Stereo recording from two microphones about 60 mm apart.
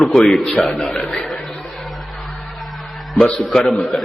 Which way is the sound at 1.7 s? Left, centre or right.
Centre.